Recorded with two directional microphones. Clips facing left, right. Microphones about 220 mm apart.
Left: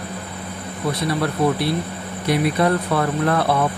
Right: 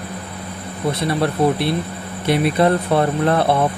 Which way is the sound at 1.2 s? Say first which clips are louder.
Right 3 dB; 25° right (ahead or behind).